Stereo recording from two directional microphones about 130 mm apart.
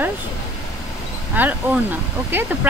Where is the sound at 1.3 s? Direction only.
15° right (ahead or behind).